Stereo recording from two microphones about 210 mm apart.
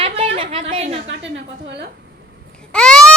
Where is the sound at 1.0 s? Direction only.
55° right (ahead or behind).